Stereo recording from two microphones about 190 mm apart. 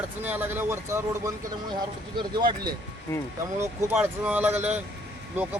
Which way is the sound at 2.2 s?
25° right (ahead or behind).